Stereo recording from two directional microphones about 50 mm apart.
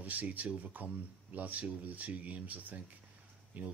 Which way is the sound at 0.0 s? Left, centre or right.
Right.